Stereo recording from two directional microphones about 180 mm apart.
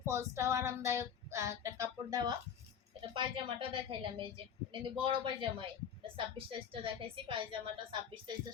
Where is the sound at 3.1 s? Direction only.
30° right (ahead or behind).